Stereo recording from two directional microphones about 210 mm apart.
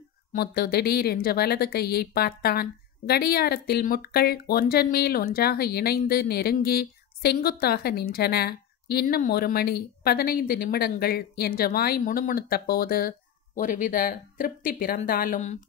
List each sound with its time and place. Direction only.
0.3 s a woman's voice: 45° left (ahead or behind)